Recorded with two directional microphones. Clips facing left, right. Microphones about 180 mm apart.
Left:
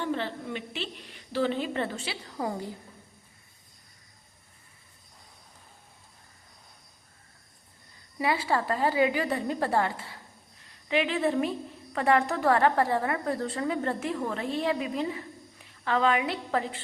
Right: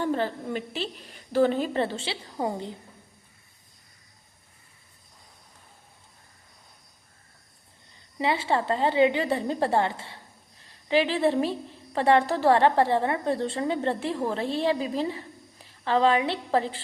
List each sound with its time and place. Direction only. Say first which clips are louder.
0.0 s a woman's voice: right 4 dB; 40° right (ahead or behind); by 2.7 s 20° right (ahead or behind)
8.2 s a woman's voice: right 2 dB; 25° right (ahead or behind)